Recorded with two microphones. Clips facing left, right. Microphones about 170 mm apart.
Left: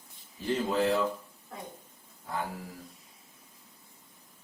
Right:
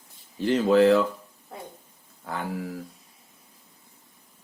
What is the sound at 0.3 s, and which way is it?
Speech, 80° right.